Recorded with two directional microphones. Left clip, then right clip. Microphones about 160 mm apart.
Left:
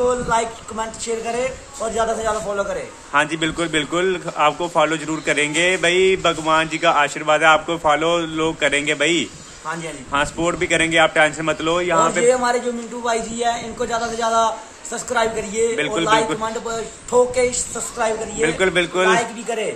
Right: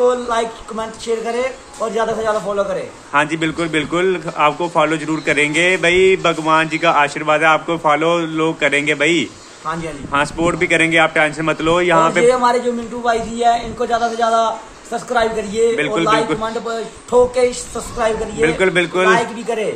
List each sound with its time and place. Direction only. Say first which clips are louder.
0.0 s a man's voice: right 3 dB; 5° left (ahead or behind)